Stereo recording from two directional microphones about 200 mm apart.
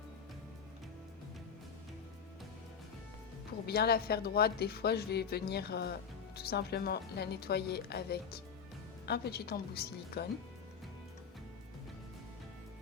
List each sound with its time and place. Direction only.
3.7 s a woman's voice: 50° left (ahead or behind)